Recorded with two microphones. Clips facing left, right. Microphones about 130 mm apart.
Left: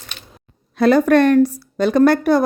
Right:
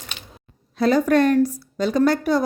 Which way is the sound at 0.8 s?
65° left (ahead or behind).